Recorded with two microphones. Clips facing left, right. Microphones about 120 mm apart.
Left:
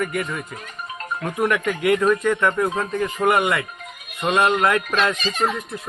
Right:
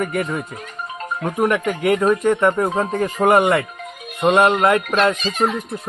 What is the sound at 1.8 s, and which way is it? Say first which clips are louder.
Speech: right 1 dB; 30° right (ahead or behind).